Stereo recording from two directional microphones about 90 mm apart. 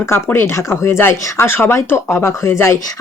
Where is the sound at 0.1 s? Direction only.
25° left (ahead or behind).